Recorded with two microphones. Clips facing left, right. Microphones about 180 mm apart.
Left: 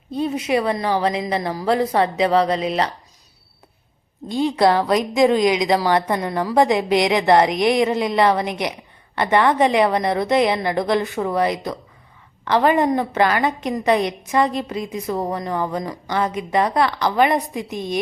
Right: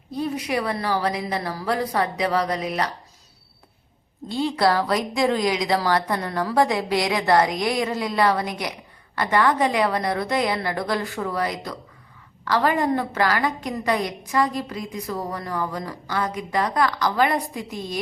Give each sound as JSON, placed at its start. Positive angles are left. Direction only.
{"t": 0.1, "sound": "a woman's voice", "side_deg": 25}
{"t": 4.3, "sound": "a woman's voice", "side_deg": 15}